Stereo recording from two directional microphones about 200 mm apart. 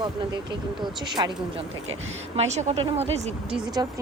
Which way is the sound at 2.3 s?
35° right (ahead or behind).